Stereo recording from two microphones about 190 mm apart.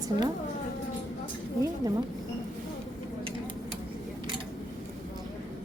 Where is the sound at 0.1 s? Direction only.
35° left (ahead or behind).